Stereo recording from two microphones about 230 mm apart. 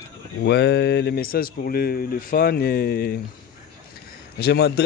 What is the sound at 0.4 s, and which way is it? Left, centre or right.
Speech, left.